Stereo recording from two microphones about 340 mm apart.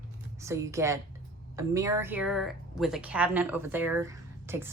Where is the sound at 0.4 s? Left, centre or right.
Centre.